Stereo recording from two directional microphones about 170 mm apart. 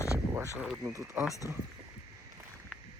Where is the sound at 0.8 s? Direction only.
15° right (ahead or behind).